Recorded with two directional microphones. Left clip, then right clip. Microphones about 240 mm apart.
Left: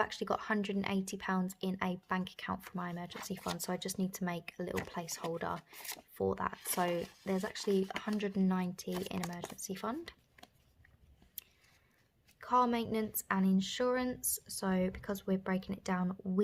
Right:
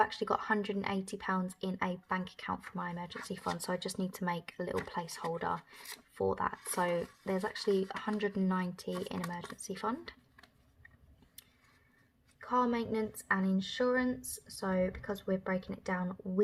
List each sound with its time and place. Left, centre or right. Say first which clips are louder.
0.0 s speech: right 4 dB; left
12.4 s a woman's voice: left 1 dB; left